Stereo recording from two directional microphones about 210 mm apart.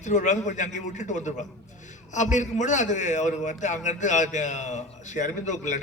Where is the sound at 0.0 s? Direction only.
35° left (ahead or behind).